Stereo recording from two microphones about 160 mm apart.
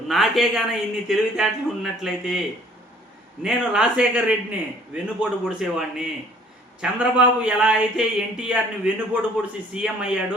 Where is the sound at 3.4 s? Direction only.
5° right (ahead or behind).